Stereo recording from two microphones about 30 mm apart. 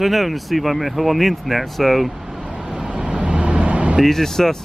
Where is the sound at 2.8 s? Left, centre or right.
Right.